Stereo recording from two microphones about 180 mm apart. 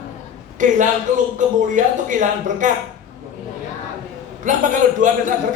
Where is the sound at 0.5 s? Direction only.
45° right (ahead or behind).